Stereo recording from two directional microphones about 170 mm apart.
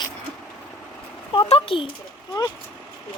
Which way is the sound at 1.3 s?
30° left (ahead or behind).